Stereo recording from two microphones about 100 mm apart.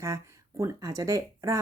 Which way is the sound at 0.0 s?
30° right (ahead or behind).